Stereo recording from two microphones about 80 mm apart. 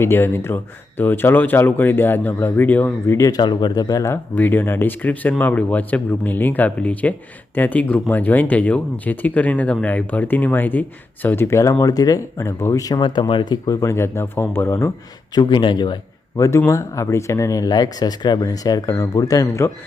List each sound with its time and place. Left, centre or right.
0.0 s speech: left
3.1 s speech: left
3.3 s speech: left
4.1 s speech: left
12.5 s speech: left
13.0 s speech: left
13.7 s speech: left
13.9 s speech: left
15.4 s speech: left
16.4 s speech: left